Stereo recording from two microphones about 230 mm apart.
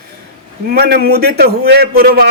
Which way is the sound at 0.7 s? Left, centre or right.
Right.